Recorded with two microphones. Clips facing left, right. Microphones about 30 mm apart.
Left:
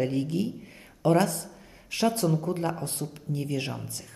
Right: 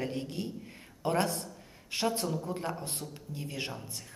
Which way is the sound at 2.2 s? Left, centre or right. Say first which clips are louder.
Left 7 dB; left.